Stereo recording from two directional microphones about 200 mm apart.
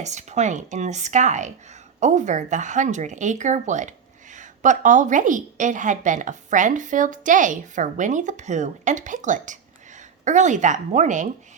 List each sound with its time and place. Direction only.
0.0 s speech: 35° right (ahead or behind)